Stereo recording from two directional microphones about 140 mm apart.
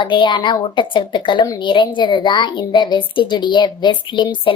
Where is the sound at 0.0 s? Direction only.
35° left (ahead or behind).